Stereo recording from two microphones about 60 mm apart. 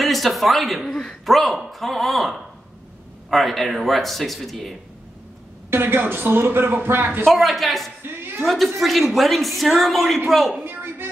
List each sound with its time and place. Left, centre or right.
0.0 s a man's voice: centre
5.7 s a man's voice: right
7.2 s a man's voice: centre
8.0 s a sound: right
8.4 s a man's voice: centre
10.6 s a sound: right